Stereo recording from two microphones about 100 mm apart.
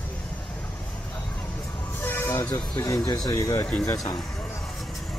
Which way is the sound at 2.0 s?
25° left (ahead or behind).